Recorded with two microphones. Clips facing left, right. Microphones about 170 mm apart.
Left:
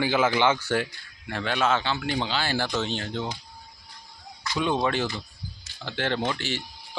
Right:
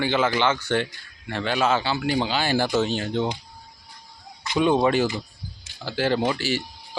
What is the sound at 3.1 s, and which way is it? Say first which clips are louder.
Speech: right 6 dB; 20° right (ahead or behind).